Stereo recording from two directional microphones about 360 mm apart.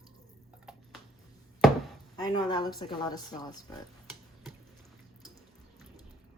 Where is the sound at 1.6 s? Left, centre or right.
Centre.